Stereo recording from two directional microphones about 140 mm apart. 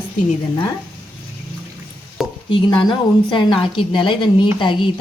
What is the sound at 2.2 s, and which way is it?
Stir, centre (ahead or behind).